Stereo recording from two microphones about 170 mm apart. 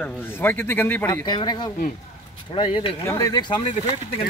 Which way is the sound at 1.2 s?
25° left (ahead or behind).